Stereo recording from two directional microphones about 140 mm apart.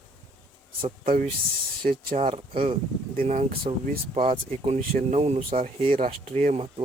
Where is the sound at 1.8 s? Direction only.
60° right (ahead or behind).